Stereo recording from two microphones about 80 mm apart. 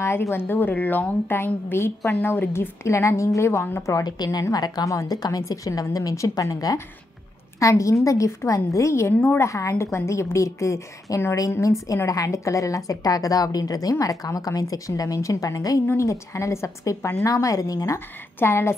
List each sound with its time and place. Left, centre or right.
0.0 s a woman's voice: left
4.0 s a woman's voice: left
9.1 s a woman's voice: left
9.4 s a woman's voice: left